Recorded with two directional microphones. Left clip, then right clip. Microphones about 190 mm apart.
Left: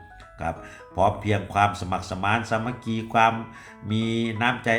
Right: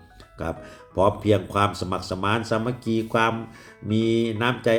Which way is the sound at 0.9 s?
25° right (ahead or behind).